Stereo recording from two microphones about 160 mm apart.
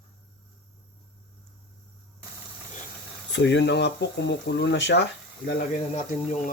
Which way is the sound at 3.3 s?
90° left.